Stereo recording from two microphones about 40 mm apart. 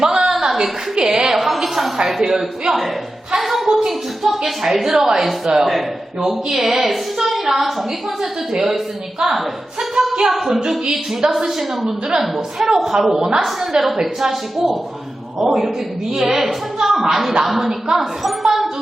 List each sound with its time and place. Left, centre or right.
0.0 s a sound: centre
1.4 s a woman's voice: centre
9.9 s a woman's voice: centre